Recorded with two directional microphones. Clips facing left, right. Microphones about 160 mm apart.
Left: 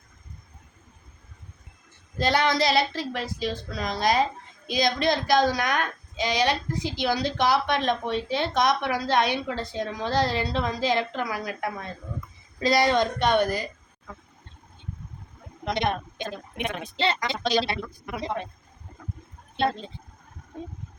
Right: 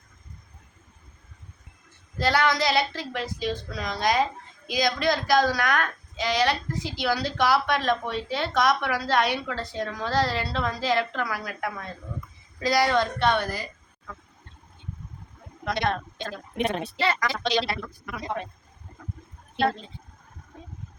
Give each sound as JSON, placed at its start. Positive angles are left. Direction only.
{"t": 2.1, "sound": "a woman's voice", "side_deg": 20}
{"t": 15.6, "sound": "a woman's voice", "side_deg": 20}
{"t": 16.6, "sound": "speech", "side_deg": -35}
{"t": 17.0, "sound": "a woman's voice", "side_deg": 25}
{"t": 17.4, "sound": "speech", "side_deg": 40}
{"t": 17.7, "sound": "a woman's voice", "side_deg": 25}